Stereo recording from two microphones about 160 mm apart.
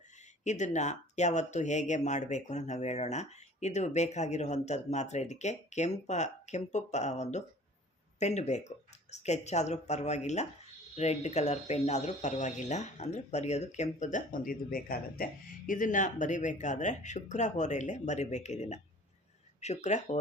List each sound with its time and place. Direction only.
0.4 s speech: 50° left (ahead or behind)